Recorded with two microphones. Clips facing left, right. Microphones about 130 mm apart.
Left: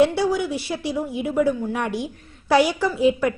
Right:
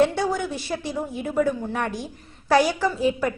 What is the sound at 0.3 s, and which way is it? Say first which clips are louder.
A woman's voice: left 3 dB; 15° left (ahead or behind).